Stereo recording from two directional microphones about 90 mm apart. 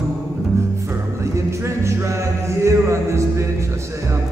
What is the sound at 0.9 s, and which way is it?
Music, 30° right (ahead or behind).